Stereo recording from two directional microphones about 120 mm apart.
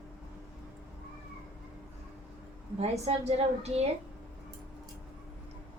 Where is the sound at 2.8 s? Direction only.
60° right (ahead or behind).